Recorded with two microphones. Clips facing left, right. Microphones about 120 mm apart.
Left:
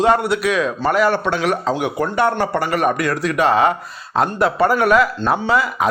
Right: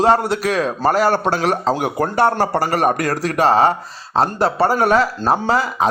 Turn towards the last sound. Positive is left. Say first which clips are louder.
# even
turn(degrees=-35)  # may be behind; listen again after turning